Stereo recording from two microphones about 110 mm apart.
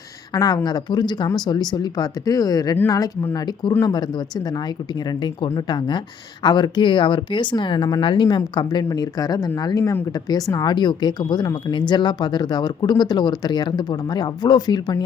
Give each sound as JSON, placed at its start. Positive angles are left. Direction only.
{"t": 0.3, "sound": "speech", "side_deg": 40}